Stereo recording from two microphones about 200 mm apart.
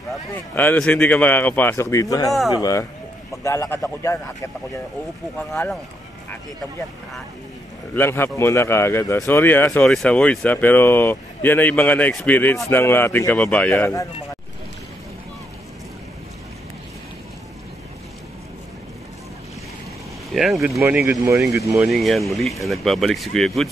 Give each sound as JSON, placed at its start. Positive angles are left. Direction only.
{"t": 0.3, "sound": "speech", "side_deg": 10}
{"t": 7.9, "sound": "speech", "side_deg": 10}
{"t": 20.3, "sound": "speech", "side_deg": 0}
{"t": 21.8, "sound": "speech", "side_deg": 0}